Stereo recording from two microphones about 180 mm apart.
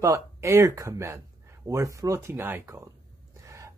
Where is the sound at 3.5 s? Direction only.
15° right (ahead or behind).